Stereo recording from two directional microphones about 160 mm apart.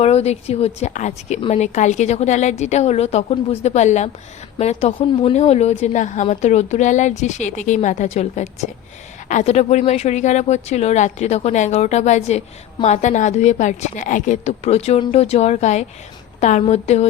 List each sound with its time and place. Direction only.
0.0 s a woman's voice: 40° left (ahead or behind)